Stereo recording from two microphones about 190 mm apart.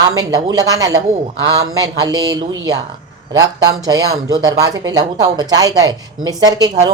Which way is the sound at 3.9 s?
20° right (ahead or behind).